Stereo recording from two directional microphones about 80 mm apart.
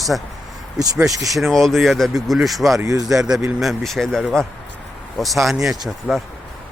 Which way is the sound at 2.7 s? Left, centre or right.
Right.